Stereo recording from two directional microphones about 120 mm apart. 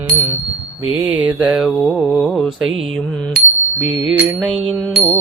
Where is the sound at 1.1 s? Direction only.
15° right (ahead or behind).